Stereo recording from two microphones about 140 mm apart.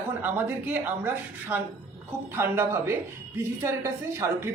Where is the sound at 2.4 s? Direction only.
15° right (ahead or behind).